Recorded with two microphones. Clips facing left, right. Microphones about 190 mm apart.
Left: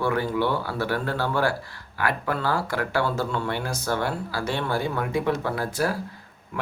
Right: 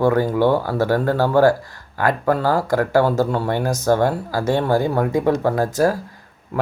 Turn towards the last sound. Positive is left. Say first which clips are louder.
# right 8 dB
turn(degrees=-45)  # may be behind; listen again after turning